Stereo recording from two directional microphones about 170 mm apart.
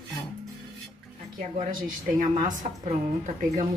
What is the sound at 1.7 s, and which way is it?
A woman's voice, 55° right (ahead or behind).